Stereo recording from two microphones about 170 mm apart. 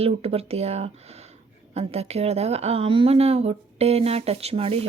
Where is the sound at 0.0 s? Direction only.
35° right (ahead or behind).